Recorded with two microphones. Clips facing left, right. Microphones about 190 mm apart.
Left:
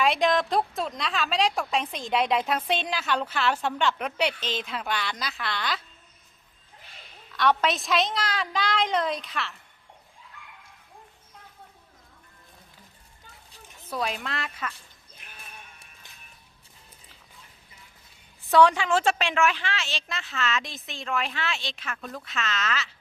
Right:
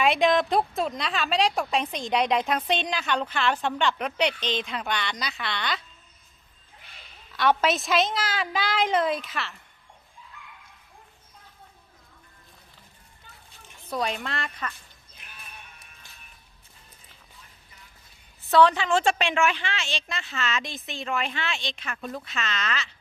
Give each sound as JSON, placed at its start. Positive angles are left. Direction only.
{"t": 0.0, "sound": "a woman's voice", "side_deg": 0}
{"t": 7.3, "sound": "a woman's voice", "side_deg": -5}
{"t": 13.9, "sound": "a woman's voice", "side_deg": 0}
{"t": 18.5, "sound": "a woman's voice", "side_deg": 10}